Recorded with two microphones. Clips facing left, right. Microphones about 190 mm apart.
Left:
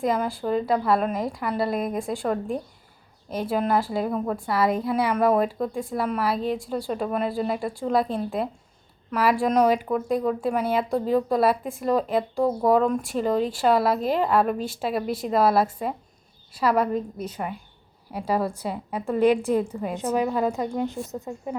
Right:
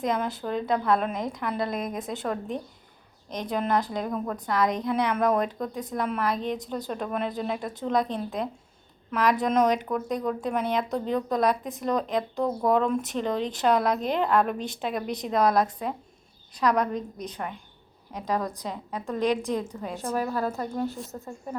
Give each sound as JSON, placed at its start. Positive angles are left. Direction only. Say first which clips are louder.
{"t": 0.0, "sound": "a woman's voice", "louder": "left 3 dB", "side_deg": 5}